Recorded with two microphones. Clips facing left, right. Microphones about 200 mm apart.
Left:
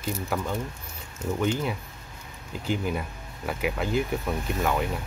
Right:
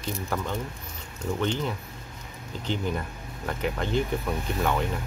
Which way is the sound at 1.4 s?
10° left (ahead or behind).